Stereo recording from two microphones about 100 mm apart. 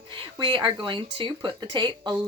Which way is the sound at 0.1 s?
55° right (ahead or behind).